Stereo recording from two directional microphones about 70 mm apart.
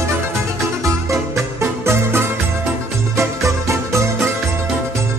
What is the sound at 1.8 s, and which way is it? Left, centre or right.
Music, right.